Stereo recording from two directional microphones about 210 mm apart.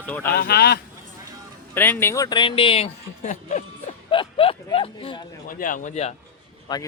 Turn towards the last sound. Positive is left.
turn(degrees=20)  # may be behind; listen again after turning